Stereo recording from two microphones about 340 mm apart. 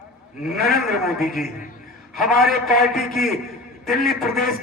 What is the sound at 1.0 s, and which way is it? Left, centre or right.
A man's voice, centre.